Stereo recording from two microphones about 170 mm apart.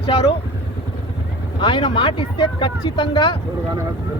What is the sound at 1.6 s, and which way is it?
Speech, 30° left (ahead or behind).